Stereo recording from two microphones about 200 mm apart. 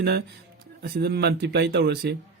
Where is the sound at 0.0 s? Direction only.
55° right (ahead or behind).